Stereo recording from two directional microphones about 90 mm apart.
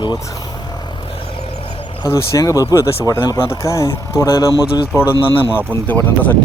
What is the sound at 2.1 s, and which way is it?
Speech, 35° left (ahead or behind).